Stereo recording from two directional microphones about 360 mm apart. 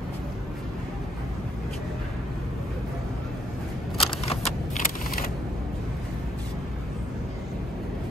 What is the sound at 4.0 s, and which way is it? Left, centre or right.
Single-lens reflex camera, centre.